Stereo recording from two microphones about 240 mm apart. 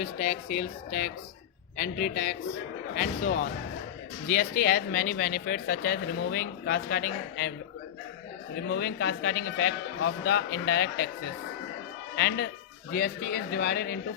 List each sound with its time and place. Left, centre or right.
0.0 s speech: left
4.3 s speech: left
8.6 s a man's voice: left
12.1 s a man's voice: left